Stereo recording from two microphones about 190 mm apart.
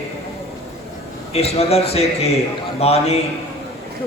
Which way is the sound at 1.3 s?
35° left (ahead or behind).